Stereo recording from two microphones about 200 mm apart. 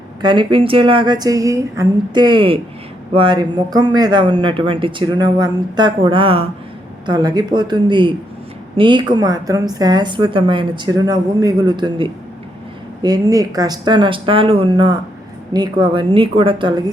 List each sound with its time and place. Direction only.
0.2 s a woman's voice: 25° right (ahead or behind)